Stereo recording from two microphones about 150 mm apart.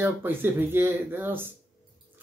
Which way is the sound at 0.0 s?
15° right (ahead or behind).